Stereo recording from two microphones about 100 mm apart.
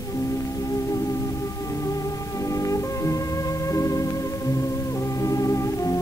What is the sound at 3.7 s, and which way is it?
Music, 35° left (ahead or behind).